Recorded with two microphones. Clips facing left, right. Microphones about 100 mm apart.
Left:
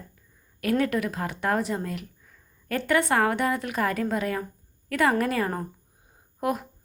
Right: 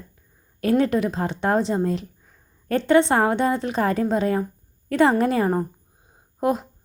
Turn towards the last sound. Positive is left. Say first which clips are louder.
# right 5 dB
turn(degrees=-25)  # may be behind; listen again after turning